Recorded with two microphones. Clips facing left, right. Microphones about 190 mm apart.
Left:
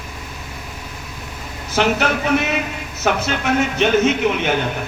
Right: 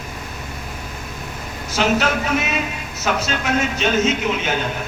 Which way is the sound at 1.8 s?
60° left (ahead or behind).